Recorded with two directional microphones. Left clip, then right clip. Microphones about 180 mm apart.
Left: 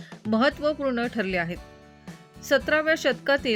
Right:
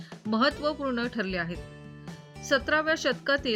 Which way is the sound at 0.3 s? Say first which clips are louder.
Left 3 dB; 20° left (ahead or behind).